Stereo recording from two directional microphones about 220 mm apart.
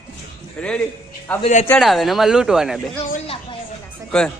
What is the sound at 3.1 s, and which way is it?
Music, 25° left (ahead or behind).